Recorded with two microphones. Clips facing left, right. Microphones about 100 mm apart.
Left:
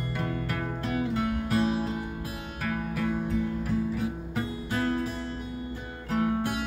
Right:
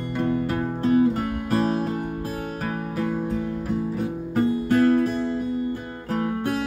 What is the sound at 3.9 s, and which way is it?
Music, 45° right (ahead or behind).